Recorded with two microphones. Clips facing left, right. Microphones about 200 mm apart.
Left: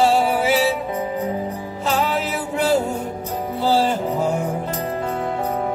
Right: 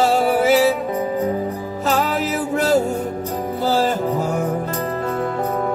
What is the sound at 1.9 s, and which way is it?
Music, 45° right (ahead or behind).